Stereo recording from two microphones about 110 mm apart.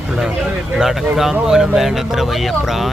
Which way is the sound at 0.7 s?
5° right (ahead or behind).